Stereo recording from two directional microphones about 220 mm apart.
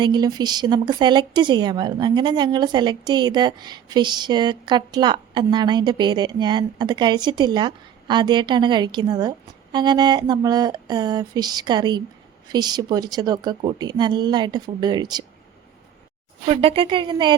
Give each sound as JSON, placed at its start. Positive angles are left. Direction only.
{"t": 0.0, "sound": "speech", "side_deg": -20}
{"t": 16.5, "sound": "speech", "side_deg": -25}